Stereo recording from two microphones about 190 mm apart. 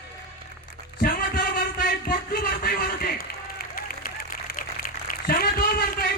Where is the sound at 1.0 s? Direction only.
50° left (ahead or behind).